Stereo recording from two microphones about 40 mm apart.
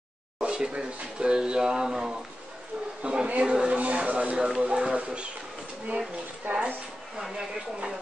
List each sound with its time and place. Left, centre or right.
0.4 s speech: right
3.0 s a sound: right
3.3 s speech: right
3.6 s a sound: right
4.6 s speech: centre
6.5 s speech: right